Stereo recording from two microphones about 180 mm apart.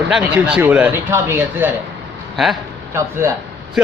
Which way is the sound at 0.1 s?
5° right (ahead or behind).